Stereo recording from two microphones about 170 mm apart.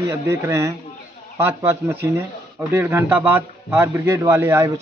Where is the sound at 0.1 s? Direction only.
15° right (ahead or behind).